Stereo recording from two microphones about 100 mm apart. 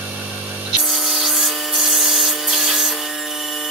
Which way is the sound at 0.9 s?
Centre (ahead or behind).